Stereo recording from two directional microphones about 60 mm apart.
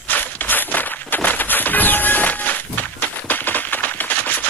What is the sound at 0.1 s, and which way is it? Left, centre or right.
Walk, left.